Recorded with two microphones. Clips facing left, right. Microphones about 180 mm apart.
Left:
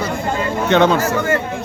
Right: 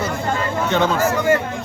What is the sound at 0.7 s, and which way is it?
Speech, 70° left (ahead or behind).